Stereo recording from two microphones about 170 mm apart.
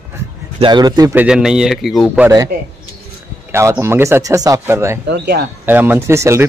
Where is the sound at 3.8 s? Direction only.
15° right (ahead or behind).